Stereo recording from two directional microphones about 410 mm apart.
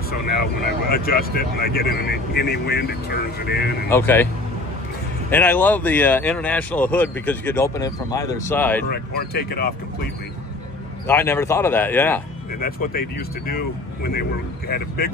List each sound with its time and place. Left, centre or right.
0.4 s speech: left
3.9 s speech: centre
5.3 s speech: centre
8.8 s speech: left
11.1 s speech: centre
12.5 s speech: left